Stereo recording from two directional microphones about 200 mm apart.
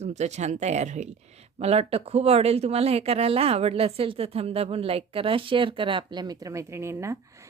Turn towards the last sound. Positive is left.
turn(degrees=-15)  # may be behind; listen again after turning